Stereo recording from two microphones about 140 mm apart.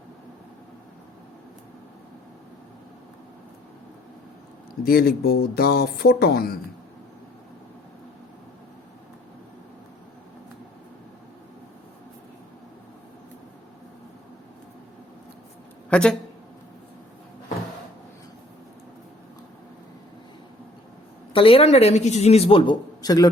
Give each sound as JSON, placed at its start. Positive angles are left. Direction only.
{"t": 4.9, "sound": "speech", "side_deg": 90}
{"t": 15.9, "sound": "speech", "side_deg": 5}
{"t": 21.3, "sound": "speech", "side_deg": 40}
{"t": 23.0, "sound": "a man's voice", "side_deg": 25}